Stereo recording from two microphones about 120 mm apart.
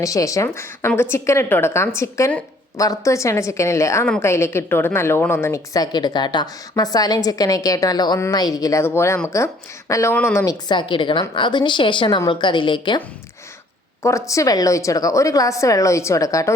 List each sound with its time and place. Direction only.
0.0 s a woman's voice: 30° left (ahead or behind)
14.0 s a woman's voice: 25° left (ahead or behind)